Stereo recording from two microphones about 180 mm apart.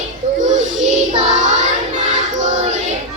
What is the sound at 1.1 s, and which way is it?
Child singing, 40° right (ahead or behind).